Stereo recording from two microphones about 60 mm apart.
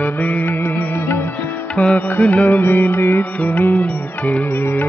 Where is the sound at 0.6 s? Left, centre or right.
Left.